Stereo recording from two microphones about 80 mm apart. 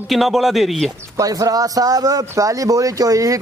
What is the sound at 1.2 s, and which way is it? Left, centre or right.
Speech, right.